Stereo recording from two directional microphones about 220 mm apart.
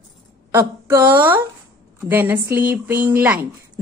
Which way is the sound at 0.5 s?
10° right (ahead or behind).